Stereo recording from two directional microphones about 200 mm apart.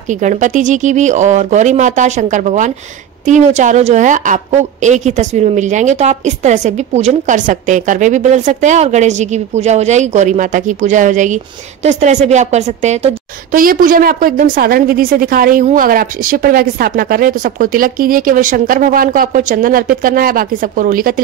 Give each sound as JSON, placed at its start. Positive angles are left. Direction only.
{"t": 0.2, "sound": "a woman's voice", "side_deg": -40}